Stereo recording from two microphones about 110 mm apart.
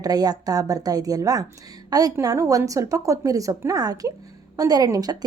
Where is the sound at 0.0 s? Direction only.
35° right (ahead or behind).